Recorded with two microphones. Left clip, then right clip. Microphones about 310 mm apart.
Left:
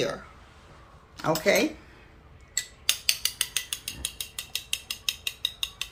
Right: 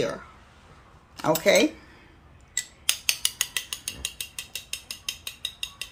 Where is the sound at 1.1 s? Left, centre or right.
Right.